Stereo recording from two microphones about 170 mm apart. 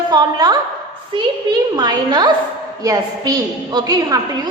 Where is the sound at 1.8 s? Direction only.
25° right (ahead or behind).